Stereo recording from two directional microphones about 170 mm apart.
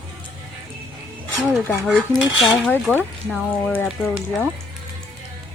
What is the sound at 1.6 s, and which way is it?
Speech, 10° left (ahead or behind).